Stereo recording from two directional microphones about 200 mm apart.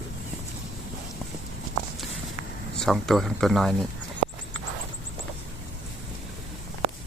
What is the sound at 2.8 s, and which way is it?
Speech, centre (ahead or behind).